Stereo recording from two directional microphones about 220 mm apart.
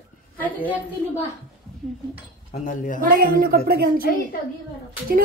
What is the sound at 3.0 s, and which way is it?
Speech, 40° right (ahead or behind).